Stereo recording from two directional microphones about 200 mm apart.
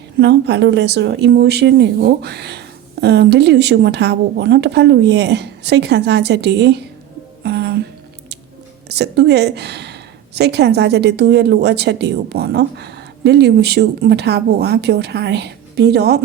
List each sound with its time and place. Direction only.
0.2 s a woman's voice: 60° right (ahead or behind)
7.4 s a sound: 55° right (ahead or behind)
8.9 s a woman's voice: 55° right (ahead or behind)